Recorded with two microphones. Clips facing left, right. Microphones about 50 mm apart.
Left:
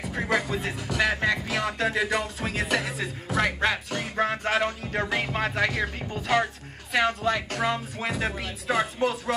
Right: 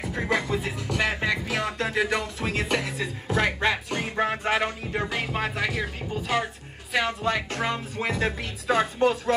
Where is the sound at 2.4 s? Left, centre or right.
Centre.